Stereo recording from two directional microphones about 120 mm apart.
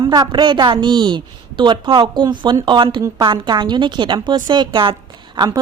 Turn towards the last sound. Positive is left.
turn(degrees=-35)  # may be behind; listen again after turning